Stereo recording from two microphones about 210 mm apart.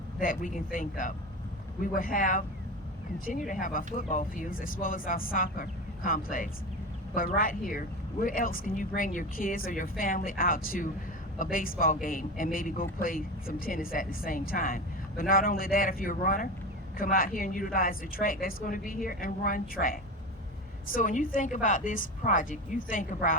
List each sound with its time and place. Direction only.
0.2 s speech: 40° left (ahead or behind)